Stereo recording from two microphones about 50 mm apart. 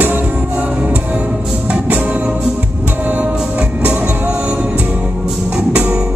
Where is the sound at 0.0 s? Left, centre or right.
Right.